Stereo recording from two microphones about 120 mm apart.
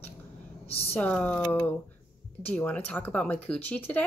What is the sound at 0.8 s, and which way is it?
Speech, 15° left (ahead or behind).